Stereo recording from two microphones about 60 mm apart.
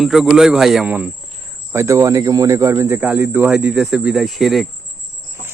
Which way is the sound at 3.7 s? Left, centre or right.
Centre.